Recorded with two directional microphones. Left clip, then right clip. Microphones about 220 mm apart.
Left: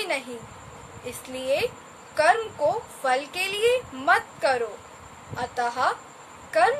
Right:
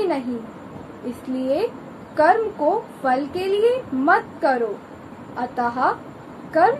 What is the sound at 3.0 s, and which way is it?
A woman's voice, 25° left (ahead or behind).